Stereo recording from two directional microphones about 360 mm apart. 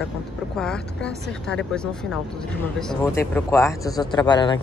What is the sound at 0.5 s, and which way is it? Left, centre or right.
A man's voice, centre.